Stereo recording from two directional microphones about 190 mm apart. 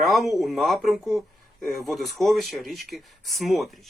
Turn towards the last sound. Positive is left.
turn(degrees=0)  # may be behind; listen again after turning